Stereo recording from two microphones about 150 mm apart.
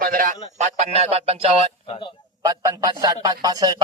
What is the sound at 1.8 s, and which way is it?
Speech, 40° left (ahead or behind).